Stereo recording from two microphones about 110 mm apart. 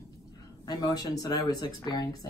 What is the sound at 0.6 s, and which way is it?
Speech, 35° left (ahead or behind).